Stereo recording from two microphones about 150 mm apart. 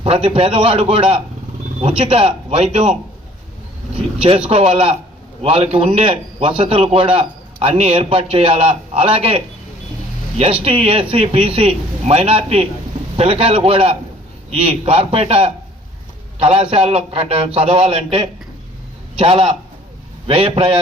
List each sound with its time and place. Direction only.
0.0 s a man's voice: 40° right (ahead or behind)
3.9 s vehicle: 40° right (ahead or behind)
4.4 s a man's voice: 40° right (ahead or behind)